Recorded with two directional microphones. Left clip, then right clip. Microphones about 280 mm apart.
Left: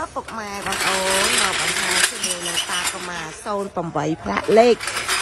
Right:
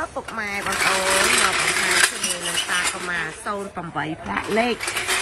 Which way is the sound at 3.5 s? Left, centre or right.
Centre.